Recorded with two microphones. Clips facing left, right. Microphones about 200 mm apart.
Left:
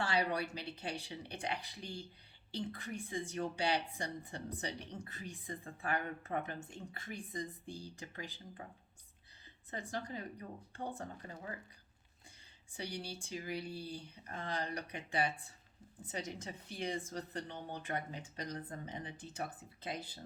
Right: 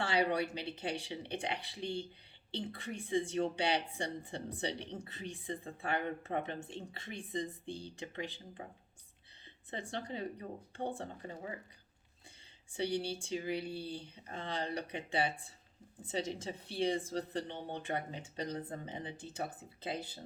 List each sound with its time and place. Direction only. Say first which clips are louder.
0.0 s speech: right 3 dB; 25° right (ahead or behind)
9.6 s speech: right 1 dB; 30° right (ahead or behind)
12.7 s speech: right 8 dB; 30° right (ahead or behind)